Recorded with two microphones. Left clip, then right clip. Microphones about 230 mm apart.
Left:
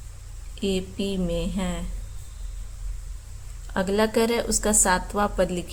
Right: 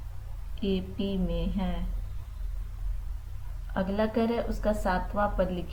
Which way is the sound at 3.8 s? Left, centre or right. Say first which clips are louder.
Left 6 dB; left.